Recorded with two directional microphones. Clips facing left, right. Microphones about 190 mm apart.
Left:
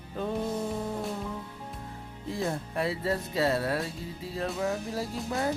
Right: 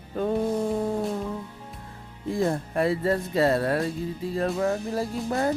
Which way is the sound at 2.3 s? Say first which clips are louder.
Right 6 dB; 50° right (ahead or behind).